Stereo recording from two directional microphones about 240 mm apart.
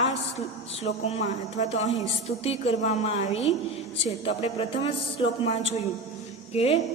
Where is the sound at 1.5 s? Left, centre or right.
Left.